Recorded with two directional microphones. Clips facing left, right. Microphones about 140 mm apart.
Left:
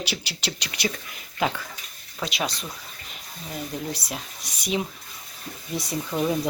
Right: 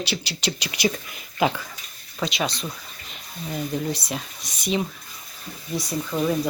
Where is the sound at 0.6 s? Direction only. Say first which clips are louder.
Right 5 dB; 15° right (ahead or behind).